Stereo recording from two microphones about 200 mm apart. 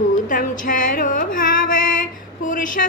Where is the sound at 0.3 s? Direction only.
40° left (ahead or behind).